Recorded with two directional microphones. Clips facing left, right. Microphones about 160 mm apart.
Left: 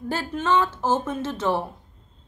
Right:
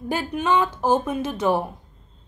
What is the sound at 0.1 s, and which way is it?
A woman's voice, 15° right (ahead or behind).